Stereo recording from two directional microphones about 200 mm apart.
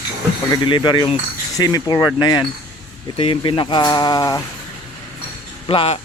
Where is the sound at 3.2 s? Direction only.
25° left (ahead or behind).